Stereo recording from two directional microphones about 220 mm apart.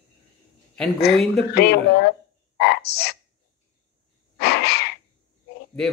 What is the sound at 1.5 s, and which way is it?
Speech, 45° left (ahead or behind).